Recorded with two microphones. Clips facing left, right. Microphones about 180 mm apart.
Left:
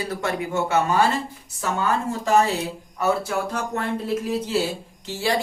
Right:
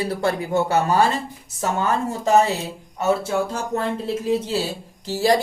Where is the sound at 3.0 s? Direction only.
25° right (ahead or behind).